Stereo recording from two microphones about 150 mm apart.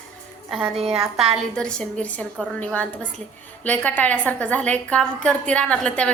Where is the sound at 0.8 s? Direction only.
40° right (ahead or behind).